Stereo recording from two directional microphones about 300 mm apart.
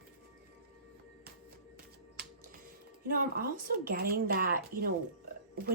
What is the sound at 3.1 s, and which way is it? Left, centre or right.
A woman's voice, right.